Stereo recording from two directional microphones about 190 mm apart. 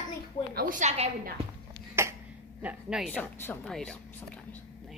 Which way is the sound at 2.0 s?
15° right (ahead or behind).